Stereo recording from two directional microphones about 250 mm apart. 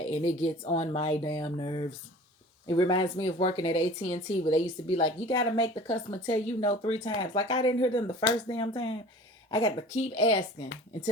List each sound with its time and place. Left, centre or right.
0.1 s speech: left